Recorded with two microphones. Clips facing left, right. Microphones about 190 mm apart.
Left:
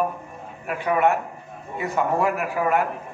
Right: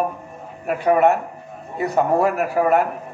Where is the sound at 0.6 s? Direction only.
40° right (ahead or behind).